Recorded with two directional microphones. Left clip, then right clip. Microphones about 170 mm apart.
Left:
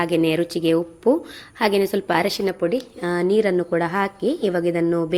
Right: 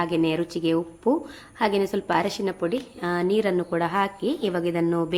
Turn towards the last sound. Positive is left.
turn(degrees=15)  # may be behind; listen again after turning